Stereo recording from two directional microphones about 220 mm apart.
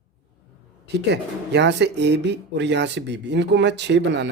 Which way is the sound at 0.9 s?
50° right (ahead or behind).